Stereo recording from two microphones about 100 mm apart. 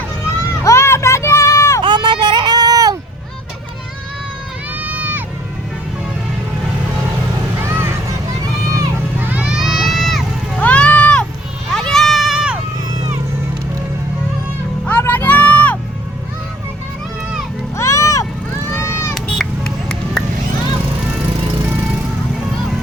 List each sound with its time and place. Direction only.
0.6 s a sound: 30° left (ahead or behind)
1.8 s a sound: 50° right (ahead or behind)
4.7 s run: 15° right (ahead or behind)
7.6 s vehicle: 25° right (ahead or behind)
9.1 s a sound: 20° right (ahead or behind)
9.6 s crowd: centre (ahead or behind)
10.6 s vehicle: 15° left (ahead or behind)
11.7 s a sound: 5° left (ahead or behind)
14.8 s music: 15° left (ahead or behind)
17.7 s music: 30° left (ahead or behind)
18.9 s run: 25° left (ahead or behind)
19.1 s run: 5° left (ahead or behind)